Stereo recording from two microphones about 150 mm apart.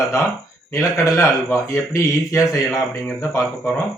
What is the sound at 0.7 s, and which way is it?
Speech, 20° left (ahead or behind).